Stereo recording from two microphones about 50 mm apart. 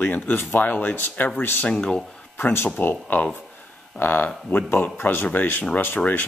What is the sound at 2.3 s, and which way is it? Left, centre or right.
Speech, left.